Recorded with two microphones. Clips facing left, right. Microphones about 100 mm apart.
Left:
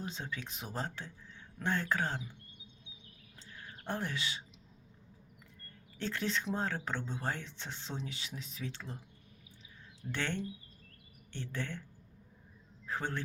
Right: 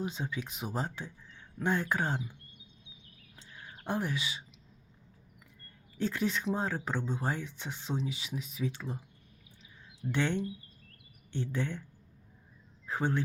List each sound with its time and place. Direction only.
0.0 s speech: 10° right (ahead or behind)
3.3 s a sound: 15° right (ahead or behind)
6.0 s speech: 10° right (ahead or behind)
10.1 s speech: 15° right (ahead or behind)
12.8 s speech: 15° right (ahead or behind)